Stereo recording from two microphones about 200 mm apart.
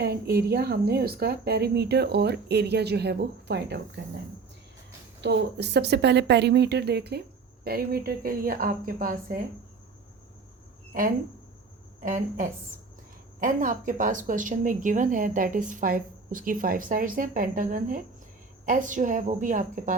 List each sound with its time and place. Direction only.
0.0 s a woman's voice: 50° right (ahead or behind)
5.2 s a woman's voice: 60° right (ahead or behind)
12.0 s speech: 40° right (ahead or behind)